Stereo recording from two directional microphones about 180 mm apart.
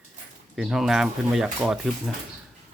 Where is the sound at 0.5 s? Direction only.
Centre (ahead or behind).